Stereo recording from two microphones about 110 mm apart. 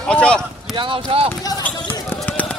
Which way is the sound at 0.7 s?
50° right (ahead or behind).